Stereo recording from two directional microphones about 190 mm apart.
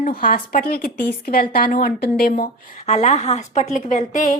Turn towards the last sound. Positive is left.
turn(degrees=40)  # may be behind; listen again after turning